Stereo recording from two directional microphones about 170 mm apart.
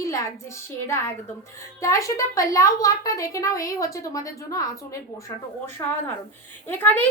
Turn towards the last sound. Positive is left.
turn(degrees=10)  # may be behind; listen again after turning